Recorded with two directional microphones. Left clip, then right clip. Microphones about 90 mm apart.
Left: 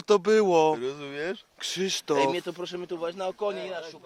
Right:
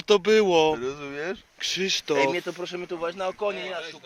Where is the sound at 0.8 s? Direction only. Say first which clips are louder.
Right 1 dB; 35° left (ahead or behind).